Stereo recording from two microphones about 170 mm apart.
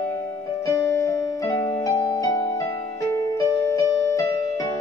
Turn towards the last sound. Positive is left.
turn(degrees=20)  # may be behind; listen again after turning